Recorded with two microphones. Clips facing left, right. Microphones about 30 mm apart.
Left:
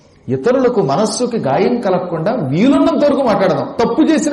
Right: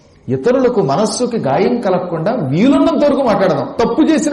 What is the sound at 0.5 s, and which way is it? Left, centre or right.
A man's voice, centre.